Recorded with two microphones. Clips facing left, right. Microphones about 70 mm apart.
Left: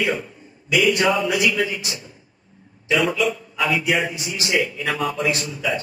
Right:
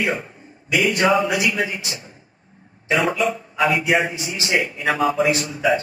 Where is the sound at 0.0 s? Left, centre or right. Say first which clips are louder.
Even; right.